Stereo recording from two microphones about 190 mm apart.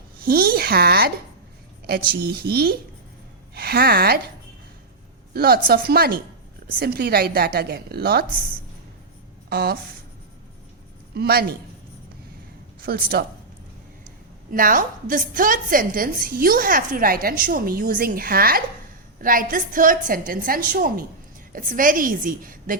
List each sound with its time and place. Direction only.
0.3 s a woman's voice: 50° right (ahead or behind)
5.3 s a woman's voice: 55° right (ahead or behind)
9.5 s speech: 55° right (ahead or behind)
11.1 s speech: 55° right (ahead or behind)
12.8 s a woman's voice: 50° right (ahead or behind)
14.5 s a woman's voice: 45° right (ahead or behind)